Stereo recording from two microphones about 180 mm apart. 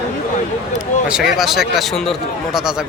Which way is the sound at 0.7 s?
5° right (ahead or behind).